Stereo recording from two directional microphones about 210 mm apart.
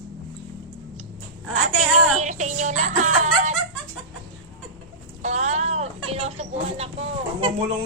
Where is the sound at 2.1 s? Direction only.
35° right (ahead or behind).